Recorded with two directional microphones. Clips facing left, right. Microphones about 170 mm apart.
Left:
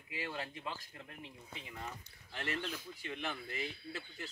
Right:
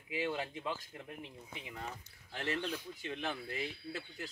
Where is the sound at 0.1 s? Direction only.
15° right (ahead or behind).